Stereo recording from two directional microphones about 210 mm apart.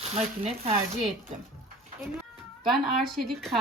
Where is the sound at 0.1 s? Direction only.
30° right (ahead or behind).